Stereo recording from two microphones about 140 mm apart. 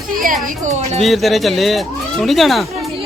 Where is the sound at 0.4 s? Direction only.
60° right (ahead or behind).